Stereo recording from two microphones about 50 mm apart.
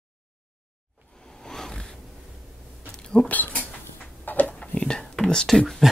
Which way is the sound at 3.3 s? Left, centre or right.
Left.